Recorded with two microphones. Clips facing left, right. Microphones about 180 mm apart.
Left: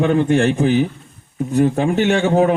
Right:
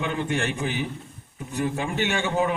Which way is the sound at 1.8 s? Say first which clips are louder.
Left 10 dB; 40° left (ahead or behind).